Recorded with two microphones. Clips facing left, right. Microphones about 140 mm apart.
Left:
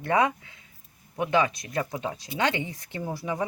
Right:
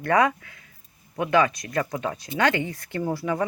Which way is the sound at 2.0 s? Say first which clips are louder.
Right 3 dB; 60° right (ahead or behind).